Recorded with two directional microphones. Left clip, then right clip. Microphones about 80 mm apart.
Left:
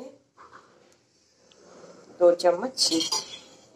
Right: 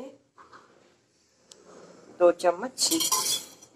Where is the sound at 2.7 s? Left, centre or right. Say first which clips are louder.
Left 1 dB; right.